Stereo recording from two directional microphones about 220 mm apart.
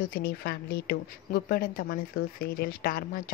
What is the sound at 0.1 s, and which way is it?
Speech, 45° left (ahead or behind).